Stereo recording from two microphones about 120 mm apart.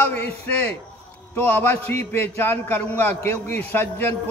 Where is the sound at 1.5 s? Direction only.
20° left (ahead or behind).